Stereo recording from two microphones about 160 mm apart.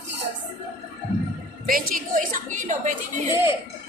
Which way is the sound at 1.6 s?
65° right (ahead or behind).